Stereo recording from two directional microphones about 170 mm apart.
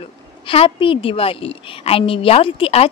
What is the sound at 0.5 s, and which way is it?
A woman's voice, 30° left (ahead or behind).